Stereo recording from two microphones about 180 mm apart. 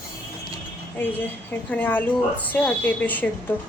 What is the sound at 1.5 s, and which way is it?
A woman's voice, 10° left (ahead or behind).